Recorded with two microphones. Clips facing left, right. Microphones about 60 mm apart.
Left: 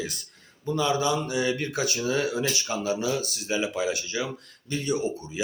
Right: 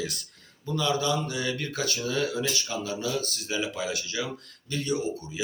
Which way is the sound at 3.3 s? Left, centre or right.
Centre.